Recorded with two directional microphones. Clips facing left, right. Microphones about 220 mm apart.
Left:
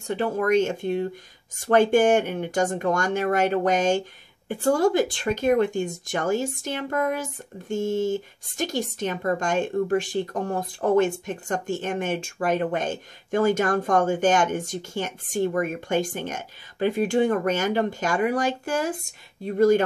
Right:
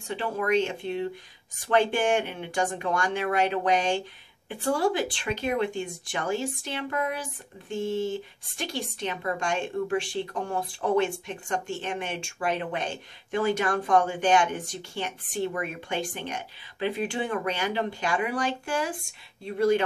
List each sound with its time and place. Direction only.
0.0 s speech: 45° left (ahead or behind)